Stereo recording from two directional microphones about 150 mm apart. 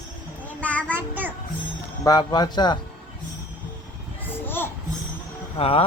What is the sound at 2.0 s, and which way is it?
Speech, 30° left (ahead or behind).